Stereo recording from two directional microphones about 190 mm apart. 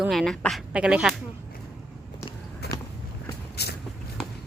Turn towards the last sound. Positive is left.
turn(degrees=60)  # may be behind; listen again after turning